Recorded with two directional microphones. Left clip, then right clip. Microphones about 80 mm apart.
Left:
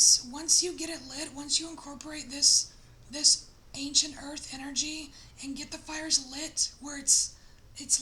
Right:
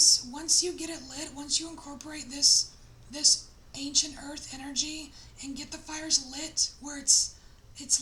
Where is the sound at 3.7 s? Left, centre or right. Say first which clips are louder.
Left 1 dB; left.